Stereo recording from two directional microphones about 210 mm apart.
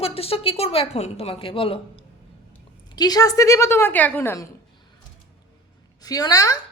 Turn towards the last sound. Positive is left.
turn(degrees=15)  # may be behind; listen again after turning